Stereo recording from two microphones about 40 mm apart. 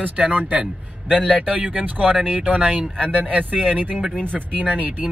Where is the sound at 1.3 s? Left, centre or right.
Right.